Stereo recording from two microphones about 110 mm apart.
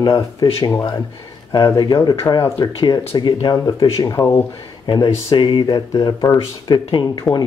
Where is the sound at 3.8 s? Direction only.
30° left (ahead or behind).